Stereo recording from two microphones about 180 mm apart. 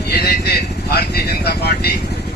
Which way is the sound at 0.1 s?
60° left (ahead or behind).